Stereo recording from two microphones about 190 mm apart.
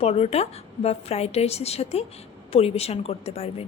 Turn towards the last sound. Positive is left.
turn(degrees=30)  # may be behind; listen again after turning